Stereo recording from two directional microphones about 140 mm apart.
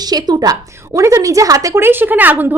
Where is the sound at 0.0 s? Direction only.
30° right (ahead or behind).